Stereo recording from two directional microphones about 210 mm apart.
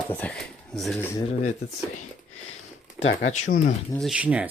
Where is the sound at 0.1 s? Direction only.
5° left (ahead or behind).